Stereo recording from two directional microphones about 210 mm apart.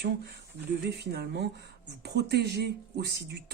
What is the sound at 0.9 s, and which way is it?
Speech, 50° right (ahead or behind).